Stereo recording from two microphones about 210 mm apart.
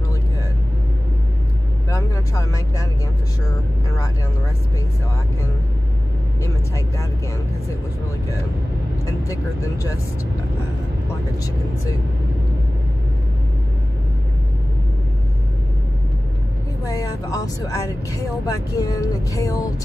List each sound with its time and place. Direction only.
1.9 s vehicle: 15° left (ahead or behind)
6.4 s speech: 15° left (ahead or behind)
16.8 s speech: 15° left (ahead or behind)